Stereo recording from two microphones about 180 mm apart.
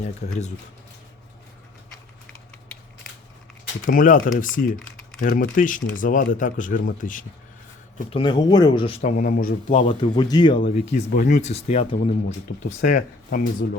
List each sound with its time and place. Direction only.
0.0 s speech: 40° left (ahead or behind)
3.8 s speech: 45° left (ahead or behind)
8.1 s speech: 25° left (ahead or behind)
9.0 s speech: 45° left (ahead or behind)
9.7 s speech: 40° left (ahead or behind)
10.2 s speech: 25° left (ahead or behind)
11.1 s speech: 45° left (ahead or behind)
12.6 s speech: 50° left (ahead or behind)